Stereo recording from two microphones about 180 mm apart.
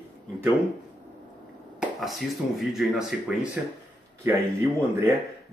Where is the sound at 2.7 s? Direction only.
5° right (ahead or behind).